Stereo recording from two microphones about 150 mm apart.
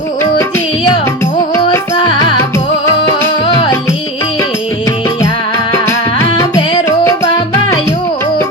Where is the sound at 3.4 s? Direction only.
35° left (ahead or behind).